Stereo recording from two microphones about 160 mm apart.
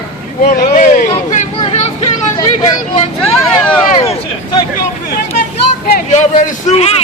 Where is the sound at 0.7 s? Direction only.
55° left (ahead or behind).